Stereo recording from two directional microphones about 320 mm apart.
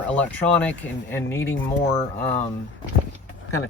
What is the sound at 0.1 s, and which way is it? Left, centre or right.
Speech, centre.